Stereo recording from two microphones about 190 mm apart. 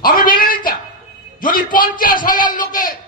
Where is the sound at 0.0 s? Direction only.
50° left (ahead or behind).